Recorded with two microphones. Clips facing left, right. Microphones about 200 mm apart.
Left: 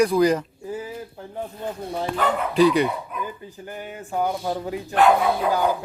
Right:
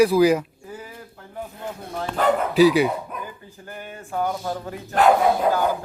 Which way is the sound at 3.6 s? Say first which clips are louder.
Left 2 dB; 15° left (ahead or behind).